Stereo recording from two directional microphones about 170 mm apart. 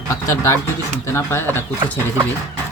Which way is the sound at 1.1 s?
15° left (ahead or behind).